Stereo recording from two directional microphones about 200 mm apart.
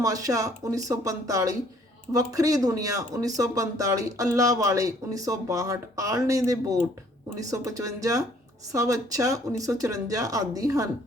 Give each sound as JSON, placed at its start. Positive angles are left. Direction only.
{"t": 0.0, "sound": "speech", "side_deg": -15}